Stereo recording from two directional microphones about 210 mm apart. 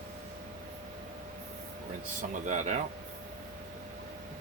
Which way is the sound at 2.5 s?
35° right (ahead or behind).